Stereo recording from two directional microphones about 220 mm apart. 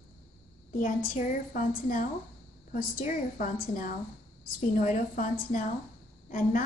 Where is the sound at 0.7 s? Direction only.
35° left (ahead or behind).